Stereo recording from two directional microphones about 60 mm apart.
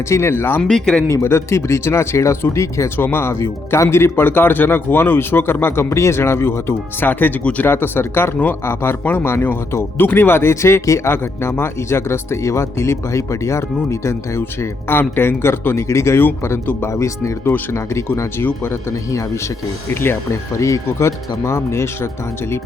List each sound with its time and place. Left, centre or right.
0.1 s speech: left
0.6 s speech: centre
1.0 s speech: left
3.0 s speech: left
7.7 s speech: left
10.5 s speech: left
11.1 s speech: left
20.6 s speech: left